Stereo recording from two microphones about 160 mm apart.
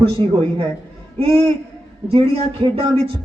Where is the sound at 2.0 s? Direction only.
35° right (ahead or behind).